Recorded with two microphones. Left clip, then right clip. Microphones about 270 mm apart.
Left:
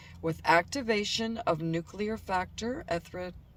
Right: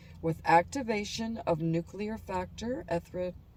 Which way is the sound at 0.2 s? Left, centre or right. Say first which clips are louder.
Even; centre.